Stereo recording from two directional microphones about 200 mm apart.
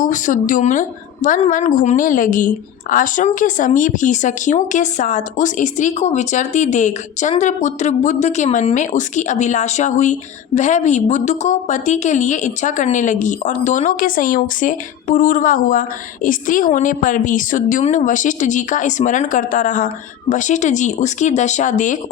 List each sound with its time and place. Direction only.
0.0 s speech: 40° left (ahead or behind)